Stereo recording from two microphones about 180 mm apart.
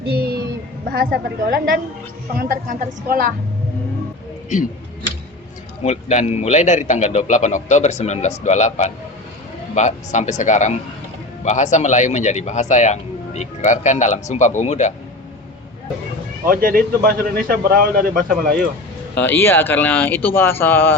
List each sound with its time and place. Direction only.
0.1 s a sound: 60° right (ahead or behind)
0.9 s speech: 60° right (ahead or behind)
5.8 s a man's voice: 40° left (ahead or behind)
16.5 s speech: 50° right (ahead or behind)
19.2 s speech: 10° left (ahead or behind)